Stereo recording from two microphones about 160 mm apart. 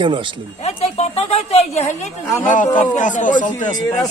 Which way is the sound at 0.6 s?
40° left (ahead or behind).